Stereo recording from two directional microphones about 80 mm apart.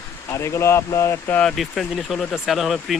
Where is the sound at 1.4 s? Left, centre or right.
Centre.